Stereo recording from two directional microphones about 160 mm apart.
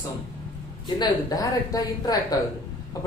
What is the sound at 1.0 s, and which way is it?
Speech, 25° left (ahead or behind).